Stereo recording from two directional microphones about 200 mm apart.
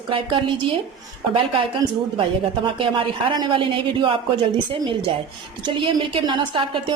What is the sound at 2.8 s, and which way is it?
A woman's voice, 25° right (ahead or behind).